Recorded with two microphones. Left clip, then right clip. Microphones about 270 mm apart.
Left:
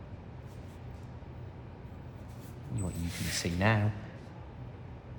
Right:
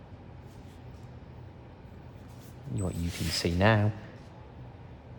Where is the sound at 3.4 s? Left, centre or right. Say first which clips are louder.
Right 5 dB; right.